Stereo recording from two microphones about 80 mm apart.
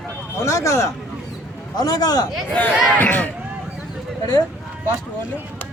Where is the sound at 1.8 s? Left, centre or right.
Left.